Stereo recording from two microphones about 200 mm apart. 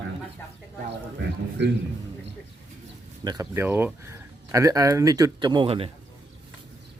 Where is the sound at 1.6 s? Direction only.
60° right (ahead or behind).